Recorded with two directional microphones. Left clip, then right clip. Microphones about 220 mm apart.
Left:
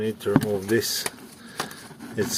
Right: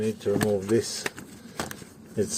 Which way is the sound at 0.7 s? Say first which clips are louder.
Left 2 dB; 5° right (ahead or behind).